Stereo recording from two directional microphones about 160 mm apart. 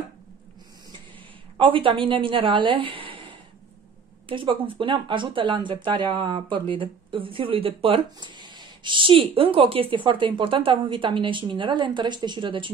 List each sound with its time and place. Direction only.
1.6 s speech: 35° right (ahead or behind)